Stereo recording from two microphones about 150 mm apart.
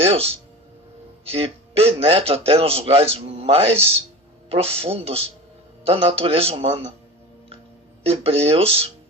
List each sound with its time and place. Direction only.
0.0 s music: 40° right (ahead or behind)
1.2 s a man's voice: 40° right (ahead or behind)
8.0 s a man's voice: 40° right (ahead or behind)